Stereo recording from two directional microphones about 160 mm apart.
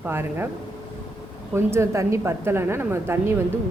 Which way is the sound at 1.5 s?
15° right (ahead or behind).